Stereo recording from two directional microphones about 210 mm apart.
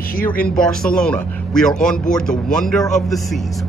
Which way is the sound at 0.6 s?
5° left (ahead or behind).